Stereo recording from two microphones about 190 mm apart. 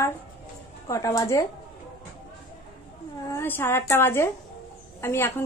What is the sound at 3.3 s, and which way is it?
A woman's voice, 10° left (ahead or behind).